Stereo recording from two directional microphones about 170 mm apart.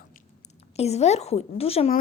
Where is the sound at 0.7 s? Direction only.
40° left (ahead or behind).